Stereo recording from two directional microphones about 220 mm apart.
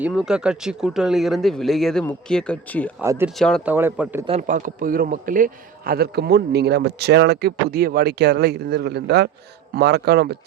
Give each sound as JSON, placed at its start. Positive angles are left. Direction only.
{"t": 0.0, "sound": "speech", "side_deg": -5}
{"t": 3.0, "sound": "speech", "side_deg": -10}
{"t": 3.3, "sound": "speech", "side_deg": 5}
{"t": 3.7, "sound": "speech", "side_deg": -10}
{"t": 4.3, "sound": "a man's voice", "side_deg": -35}